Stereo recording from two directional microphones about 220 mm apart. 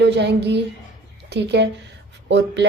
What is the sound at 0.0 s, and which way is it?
A woman's voice, 50° right (ahead or behind).